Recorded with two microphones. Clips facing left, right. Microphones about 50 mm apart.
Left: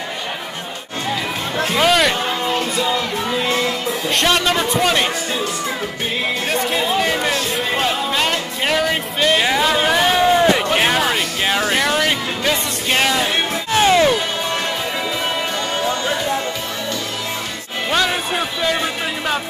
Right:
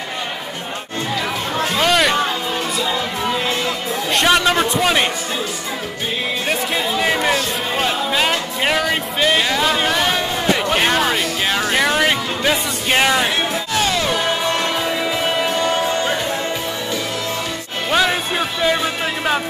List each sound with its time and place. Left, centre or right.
1.8 s music: centre
4.1 s a man's voice: centre
6.5 s music: centre
9.4 s a sound: centre
10.7 s music: centre
13.7 s music: left